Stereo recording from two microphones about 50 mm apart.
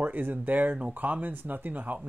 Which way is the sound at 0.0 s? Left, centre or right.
Right.